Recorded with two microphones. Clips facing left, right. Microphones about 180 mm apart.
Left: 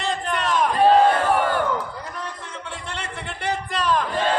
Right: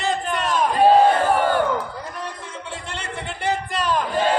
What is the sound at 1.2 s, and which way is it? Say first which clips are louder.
Crowd: right 2 dB; centre (ahead or behind).